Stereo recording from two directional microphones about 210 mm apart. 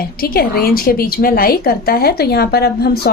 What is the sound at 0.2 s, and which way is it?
A woman's voice, 45° left (ahead or behind).